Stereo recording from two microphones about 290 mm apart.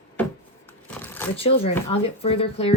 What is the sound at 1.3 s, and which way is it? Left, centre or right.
A woman's voice, centre.